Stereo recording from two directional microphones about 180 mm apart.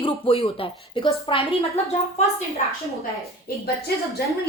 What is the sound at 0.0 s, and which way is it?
Speech, 30° left (ahead or behind).